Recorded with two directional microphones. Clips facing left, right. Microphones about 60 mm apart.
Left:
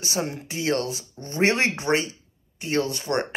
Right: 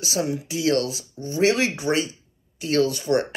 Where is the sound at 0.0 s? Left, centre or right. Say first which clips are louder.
Right 3 dB; left.